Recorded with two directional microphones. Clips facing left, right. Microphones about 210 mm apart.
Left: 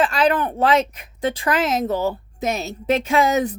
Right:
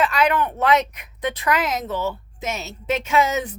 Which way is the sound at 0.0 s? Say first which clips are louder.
Left 2 dB; 30° left (ahead or behind).